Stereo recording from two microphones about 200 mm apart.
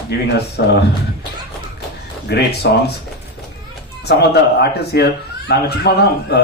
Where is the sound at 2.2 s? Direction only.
55° left (ahead or behind).